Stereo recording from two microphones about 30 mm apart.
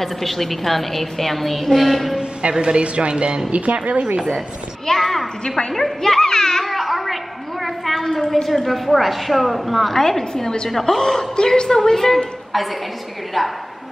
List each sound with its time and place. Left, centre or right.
0.0 s a woman's voice: centre
2.5 s speech: right
3.5 s speech: right
4.8 s a woman's voice: centre
6.6 s music: centre
7.6 s a sound: centre
8.5 s a woman's voice: centre
9.9 s a woman's voice: centre
10.7 s a woman's voice: centre
11.0 s a woman's voice: centre
12.5 s a woman's voice: centre